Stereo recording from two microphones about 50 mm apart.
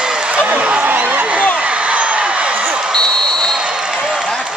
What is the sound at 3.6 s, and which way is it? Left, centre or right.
Basketball bounce, centre.